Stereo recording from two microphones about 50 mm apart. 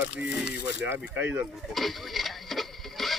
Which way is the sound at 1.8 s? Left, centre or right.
Centre.